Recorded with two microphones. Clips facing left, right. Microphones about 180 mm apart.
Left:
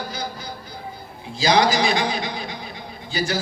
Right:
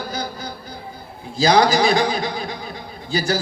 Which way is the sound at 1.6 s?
40° right (ahead or behind).